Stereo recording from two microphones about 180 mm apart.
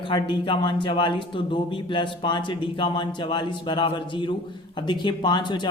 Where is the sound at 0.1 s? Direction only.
25° left (ahead or behind).